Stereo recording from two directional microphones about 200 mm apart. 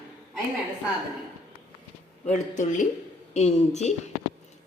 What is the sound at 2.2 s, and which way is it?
A woman's voice, 40° left (ahead or behind).